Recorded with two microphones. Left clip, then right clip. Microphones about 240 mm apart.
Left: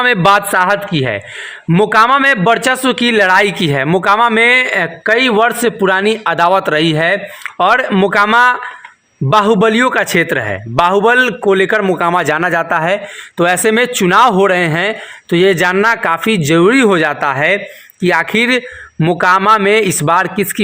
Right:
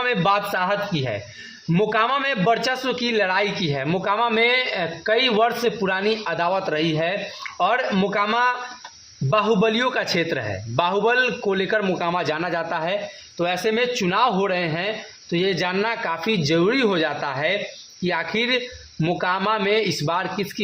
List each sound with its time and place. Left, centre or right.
0.0 s a man's voice: left
9.6 s a man's voice: left